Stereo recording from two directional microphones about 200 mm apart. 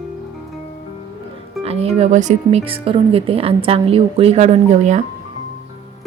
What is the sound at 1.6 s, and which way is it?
A woman's voice, 30° right (ahead or behind).